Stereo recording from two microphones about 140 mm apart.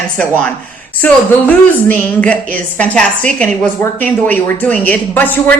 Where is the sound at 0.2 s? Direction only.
10° left (ahead or behind).